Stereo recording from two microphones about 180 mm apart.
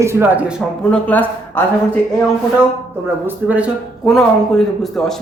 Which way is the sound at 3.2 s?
10° right (ahead or behind).